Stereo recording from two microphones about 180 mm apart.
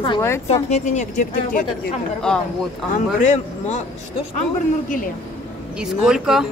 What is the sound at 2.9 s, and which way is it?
Speech, 40° left (ahead or behind).